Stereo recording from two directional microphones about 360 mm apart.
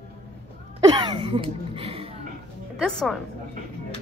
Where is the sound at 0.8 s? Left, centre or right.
Centre.